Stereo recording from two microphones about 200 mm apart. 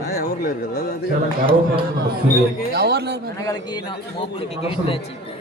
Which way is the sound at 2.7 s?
50° right (ahead or behind).